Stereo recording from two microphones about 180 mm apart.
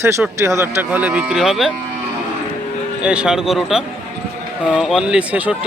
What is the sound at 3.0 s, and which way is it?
Speech, 5° right (ahead or behind).